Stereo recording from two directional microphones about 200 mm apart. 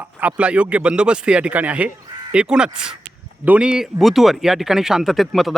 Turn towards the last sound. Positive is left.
turn(degrees=0)  # may be behind; listen again after turning